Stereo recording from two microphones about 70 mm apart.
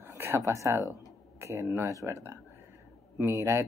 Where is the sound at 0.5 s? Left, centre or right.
Right.